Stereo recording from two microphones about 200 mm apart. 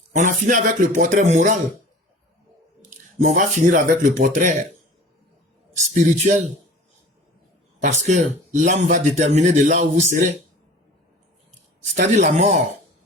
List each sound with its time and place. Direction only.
0.1 s a man's voice: 40° right (ahead or behind)
3.2 s a man's voice: 40° right (ahead or behind)
5.9 s a man's voice: 35° right (ahead or behind)
7.8 s a man's voice: 35° right (ahead or behind)
11.9 s a man's voice: 35° right (ahead or behind)